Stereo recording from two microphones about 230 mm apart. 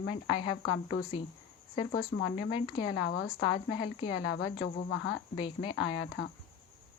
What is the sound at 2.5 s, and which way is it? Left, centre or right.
Speech, left.